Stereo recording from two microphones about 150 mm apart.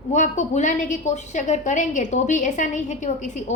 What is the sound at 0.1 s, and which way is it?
A woman's voice, 50° left (ahead or behind).